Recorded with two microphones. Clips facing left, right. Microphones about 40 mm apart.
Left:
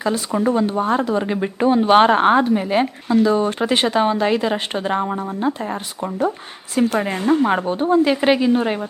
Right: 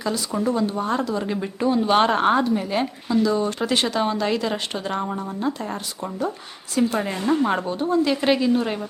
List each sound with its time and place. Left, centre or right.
0.0 s speech: left
7.1 s speech: left
7.4 s speech: centre
7.7 s speech: left